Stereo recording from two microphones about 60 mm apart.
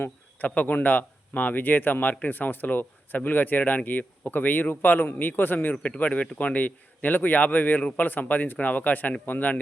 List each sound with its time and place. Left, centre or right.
0.4 s a man's voice: left